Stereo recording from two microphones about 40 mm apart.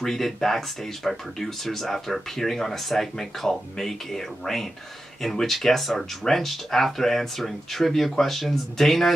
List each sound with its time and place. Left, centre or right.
0.0 s speech: centre